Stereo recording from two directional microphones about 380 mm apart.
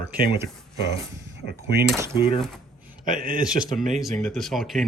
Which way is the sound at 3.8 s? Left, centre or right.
Centre.